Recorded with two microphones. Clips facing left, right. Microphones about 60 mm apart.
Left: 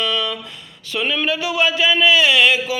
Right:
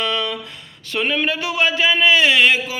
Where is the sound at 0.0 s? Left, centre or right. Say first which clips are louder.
Even; right.